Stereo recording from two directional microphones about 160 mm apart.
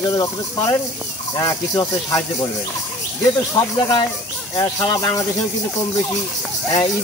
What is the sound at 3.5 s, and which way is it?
Speech, 25° left (ahead or behind).